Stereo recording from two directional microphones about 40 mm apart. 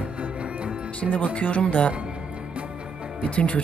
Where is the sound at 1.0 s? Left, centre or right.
Left.